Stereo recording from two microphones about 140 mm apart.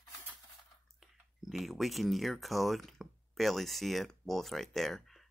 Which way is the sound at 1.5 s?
Centre (ahead or behind).